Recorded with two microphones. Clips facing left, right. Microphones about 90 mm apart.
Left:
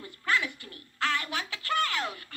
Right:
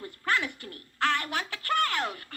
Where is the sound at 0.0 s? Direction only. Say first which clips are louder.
Even; 45° right (ahead or behind).